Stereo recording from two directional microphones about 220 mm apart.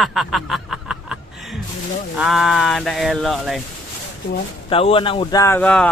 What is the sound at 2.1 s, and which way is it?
Speech, centre (ahead or behind).